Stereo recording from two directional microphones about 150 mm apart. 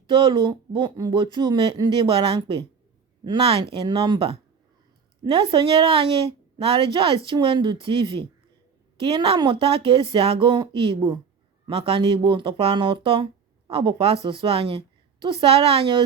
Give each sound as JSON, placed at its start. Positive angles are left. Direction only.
{"t": 0.1, "sound": "speech", "side_deg": -30}